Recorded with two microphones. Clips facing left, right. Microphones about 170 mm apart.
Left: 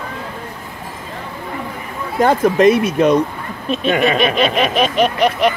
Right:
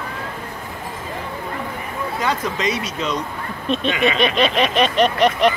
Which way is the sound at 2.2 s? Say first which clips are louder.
Left 12 dB; 50° left (ahead or behind).